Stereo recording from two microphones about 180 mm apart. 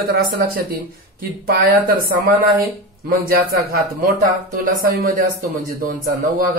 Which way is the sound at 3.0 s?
55° right (ahead or behind).